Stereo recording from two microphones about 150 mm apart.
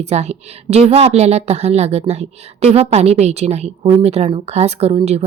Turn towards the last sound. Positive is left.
turn(degrees=-45)  # may be behind; listen again after turning